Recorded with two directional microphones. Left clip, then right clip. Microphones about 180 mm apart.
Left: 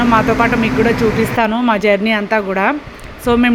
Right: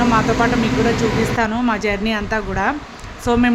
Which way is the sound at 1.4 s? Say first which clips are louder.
Left 5 dB; 20° left (ahead or behind).